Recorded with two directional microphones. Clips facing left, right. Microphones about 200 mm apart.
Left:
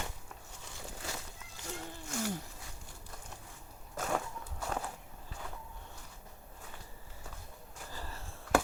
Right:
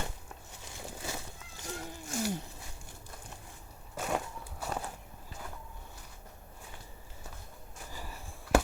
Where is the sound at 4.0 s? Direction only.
15° right (ahead or behind).